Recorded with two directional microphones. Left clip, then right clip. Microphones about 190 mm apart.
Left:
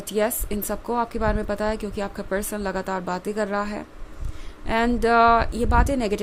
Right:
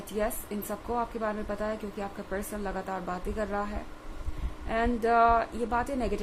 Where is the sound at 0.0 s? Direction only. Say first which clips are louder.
Left 8 dB; 45° left (ahead or behind).